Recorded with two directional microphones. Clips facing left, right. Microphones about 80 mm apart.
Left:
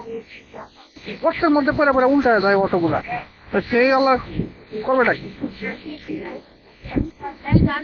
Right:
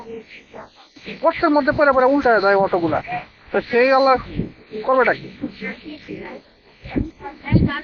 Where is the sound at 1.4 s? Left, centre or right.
Centre.